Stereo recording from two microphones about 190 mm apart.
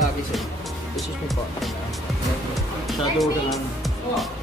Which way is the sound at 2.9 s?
Centre (ahead or behind).